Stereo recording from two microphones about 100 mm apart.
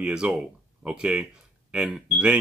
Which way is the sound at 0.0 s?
10° right (ahead or behind).